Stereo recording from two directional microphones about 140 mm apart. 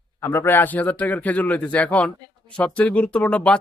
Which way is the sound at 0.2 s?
15° left (ahead or behind).